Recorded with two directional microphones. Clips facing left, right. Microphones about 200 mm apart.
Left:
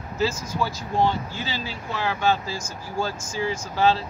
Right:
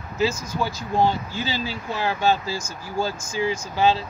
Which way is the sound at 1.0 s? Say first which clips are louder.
Right 2 dB; 35° right (ahead or behind).